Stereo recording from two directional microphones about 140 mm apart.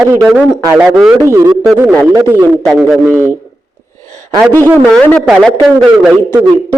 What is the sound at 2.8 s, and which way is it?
Speech, 10° right (ahead or behind).